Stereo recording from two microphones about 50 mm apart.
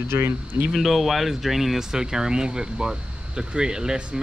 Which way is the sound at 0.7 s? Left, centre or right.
Centre.